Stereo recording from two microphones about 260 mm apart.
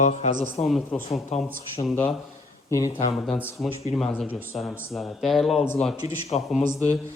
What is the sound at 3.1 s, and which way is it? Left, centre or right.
Speech, centre.